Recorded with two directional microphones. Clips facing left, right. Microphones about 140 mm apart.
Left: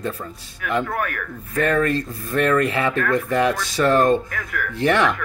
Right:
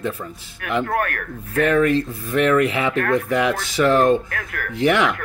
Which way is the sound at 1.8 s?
15° right (ahead or behind).